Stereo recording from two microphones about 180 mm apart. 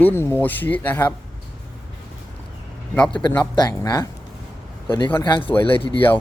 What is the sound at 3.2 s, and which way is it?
Speech, 10° left (ahead or behind).